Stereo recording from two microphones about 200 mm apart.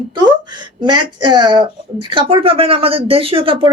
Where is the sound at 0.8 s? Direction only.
20° right (ahead or behind).